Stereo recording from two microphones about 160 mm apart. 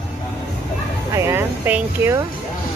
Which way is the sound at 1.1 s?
15° right (ahead or behind).